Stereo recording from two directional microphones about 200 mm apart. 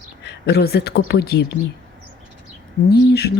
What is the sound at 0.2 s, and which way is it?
Speech, 55° left (ahead or behind).